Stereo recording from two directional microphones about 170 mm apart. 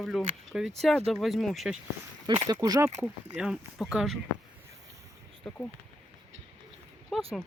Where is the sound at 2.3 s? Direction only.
25° right (ahead or behind).